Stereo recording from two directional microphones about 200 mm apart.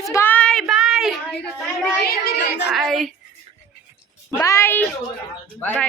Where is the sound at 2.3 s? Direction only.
60° left (ahead or behind).